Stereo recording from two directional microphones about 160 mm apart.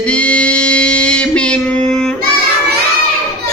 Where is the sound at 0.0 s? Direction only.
5° left (ahead or behind).